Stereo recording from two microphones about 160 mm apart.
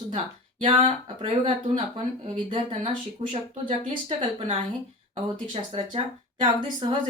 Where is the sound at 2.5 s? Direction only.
45° right (ahead or behind).